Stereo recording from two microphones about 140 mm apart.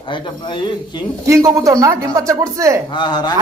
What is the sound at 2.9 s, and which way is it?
Speech, 30° left (ahead or behind).